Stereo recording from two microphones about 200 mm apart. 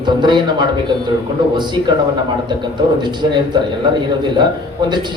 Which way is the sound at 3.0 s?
20° right (ahead or behind).